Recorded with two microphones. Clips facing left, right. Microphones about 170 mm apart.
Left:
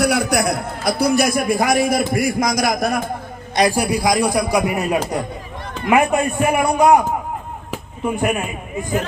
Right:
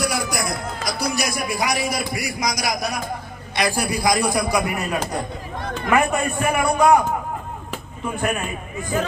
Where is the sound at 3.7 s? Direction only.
10° left (ahead or behind).